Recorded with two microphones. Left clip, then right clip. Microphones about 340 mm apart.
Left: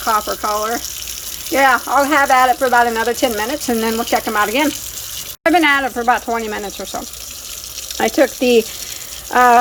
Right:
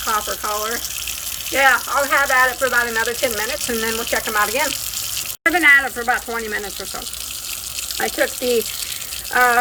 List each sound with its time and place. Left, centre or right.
0.1 s speech: centre
7.9 s speech: left
9.3 s speech: left